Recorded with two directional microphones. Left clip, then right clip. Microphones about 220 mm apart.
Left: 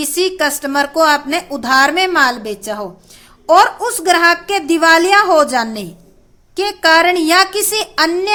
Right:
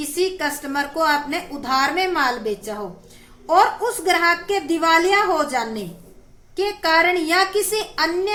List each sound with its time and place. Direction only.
0.0 s a woman's voice: 50° left (ahead or behind)